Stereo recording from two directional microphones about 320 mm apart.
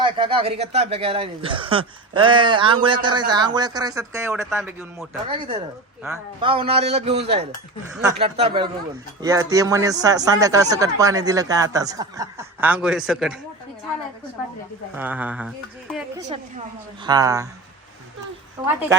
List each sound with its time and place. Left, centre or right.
0.0 s a man's voice: centre
14.9 s speech: centre
16.3 s speech: centre
18.6 s speech: centre